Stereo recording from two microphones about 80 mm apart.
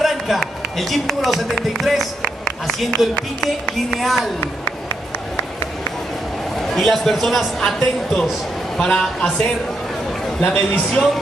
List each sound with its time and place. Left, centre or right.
0.0 s a man's voice: centre
6.6 s a man's voice: centre